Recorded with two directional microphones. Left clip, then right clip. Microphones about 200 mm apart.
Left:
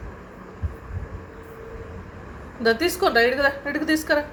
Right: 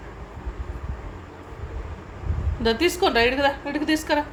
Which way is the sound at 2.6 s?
5° right (ahead or behind).